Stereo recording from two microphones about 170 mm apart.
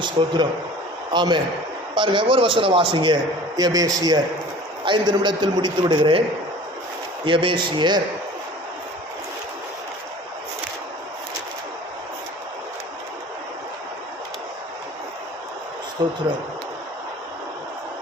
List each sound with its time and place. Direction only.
0.2 s a man's voice: 25° right (ahead or behind)
7.3 s a man's voice: 30° right (ahead or behind)
16.0 s a man's voice: 25° right (ahead or behind)